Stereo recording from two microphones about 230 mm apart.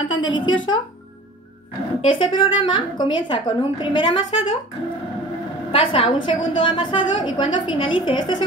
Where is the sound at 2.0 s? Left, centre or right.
Left.